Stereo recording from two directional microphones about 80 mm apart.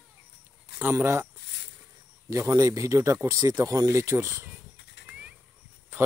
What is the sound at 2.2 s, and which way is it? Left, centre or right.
Speech, right.